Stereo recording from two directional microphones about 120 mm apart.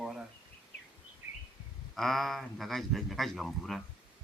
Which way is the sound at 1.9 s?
Centre (ahead or behind).